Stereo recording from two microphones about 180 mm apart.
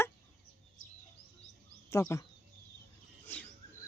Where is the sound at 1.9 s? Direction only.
15° left (ahead or behind).